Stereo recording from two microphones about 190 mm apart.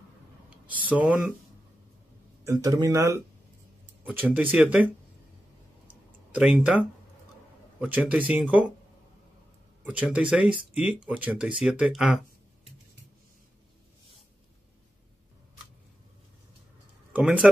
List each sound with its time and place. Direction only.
0.7 s speech: 5° right (ahead or behind)
2.4 s speech: 15° right (ahead or behind)
6.3 s speech: 5° right (ahead or behind)
7.8 s speech: 10° right (ahead or behind)
9.8 s speech: 5° right (ahead or behind)
17.1 s speech: 5° right (ahead or behind)